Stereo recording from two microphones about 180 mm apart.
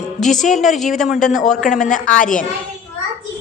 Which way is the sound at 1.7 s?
45° left (ahead or behind).